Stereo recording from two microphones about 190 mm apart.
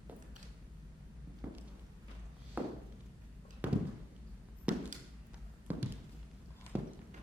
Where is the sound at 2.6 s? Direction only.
10° right (ahead or behind).